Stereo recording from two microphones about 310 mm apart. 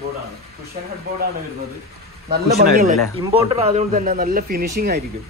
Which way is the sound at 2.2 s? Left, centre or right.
Right.